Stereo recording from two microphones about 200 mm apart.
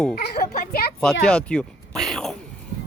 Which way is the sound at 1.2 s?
5° left (ahead or behind).